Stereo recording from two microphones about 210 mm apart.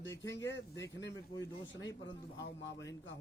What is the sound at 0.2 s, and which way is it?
Speech, 60° left (ahead or behind).